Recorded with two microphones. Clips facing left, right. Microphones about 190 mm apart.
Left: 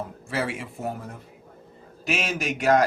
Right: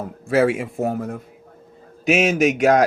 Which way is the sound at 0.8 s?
65° right (ahead or behind).